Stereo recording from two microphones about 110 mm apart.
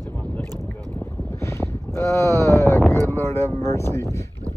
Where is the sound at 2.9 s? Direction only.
25° left (ahead or behind).